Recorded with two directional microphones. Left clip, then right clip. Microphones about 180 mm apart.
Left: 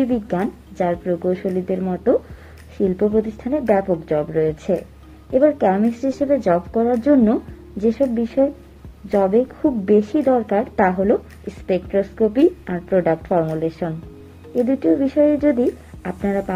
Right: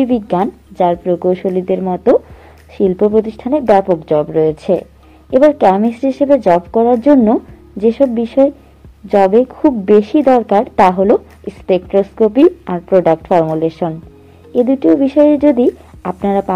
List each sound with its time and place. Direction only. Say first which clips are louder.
0.0 s a woman's voice: right 7 dB; 10° right (ahead or behind)
1.8 s a woman's voice: right 7 dB; 5° right (ahead or behind)